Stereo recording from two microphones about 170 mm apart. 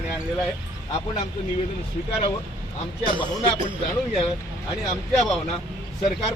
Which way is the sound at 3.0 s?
30° left (ahead or behind).